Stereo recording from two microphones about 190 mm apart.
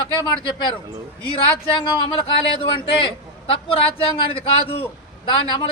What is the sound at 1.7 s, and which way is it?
A man's voice, 25° left (ahead or behind).